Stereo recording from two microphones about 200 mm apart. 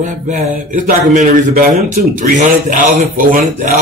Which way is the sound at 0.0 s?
40° right (ahead or behind).